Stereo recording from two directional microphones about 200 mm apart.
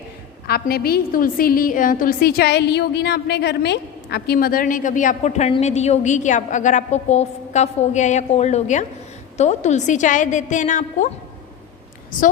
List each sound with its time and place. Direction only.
0.4 s a woman's voice: 50° left (ahead or behind)